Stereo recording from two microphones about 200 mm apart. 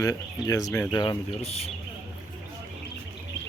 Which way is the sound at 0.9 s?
20° left (ahead or behind).